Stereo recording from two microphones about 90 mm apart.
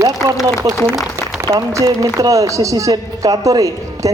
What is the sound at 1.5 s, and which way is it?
A man's voice, 45° right (ahead or behind).